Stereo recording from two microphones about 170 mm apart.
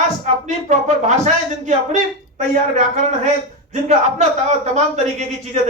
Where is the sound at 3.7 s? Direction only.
40° right (ahead or behind).